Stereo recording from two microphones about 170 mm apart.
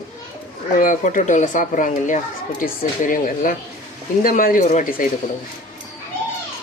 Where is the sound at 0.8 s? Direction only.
50° left (ahead or behind).